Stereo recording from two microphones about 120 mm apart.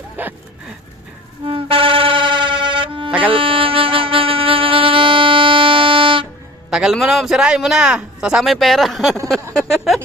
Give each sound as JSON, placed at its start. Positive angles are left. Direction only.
{"t": 0.2, "sound": "dog", "side_deg": -15}
{"t": 1.5, "sound": "music", "side_deg": -50}
{"t": 3.1, "sound": "music", "side_deg": -10}
{"t": 3.3, "sound": "music", "side_deg": -45}
{"t": 6.7, "sound": "a man's voice", "side_deg": -5}
{"t": 9.6, "sound": "a sound", "side_deg": 0}